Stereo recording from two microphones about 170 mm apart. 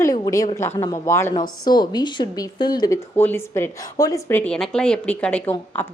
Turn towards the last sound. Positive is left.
turn(degrees=10)  # may be behind; listen again after turning